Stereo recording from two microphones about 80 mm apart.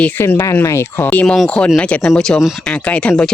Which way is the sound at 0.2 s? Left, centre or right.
Left.